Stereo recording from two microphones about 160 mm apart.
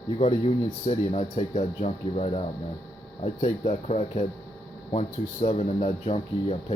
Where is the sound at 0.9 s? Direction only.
45° left (ahead or behind).